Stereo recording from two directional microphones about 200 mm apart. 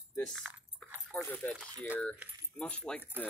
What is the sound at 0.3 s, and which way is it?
Keys jangling, centre (ahead or behind).